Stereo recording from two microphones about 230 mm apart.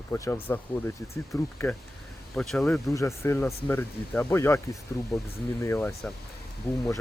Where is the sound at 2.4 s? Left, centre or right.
Centre.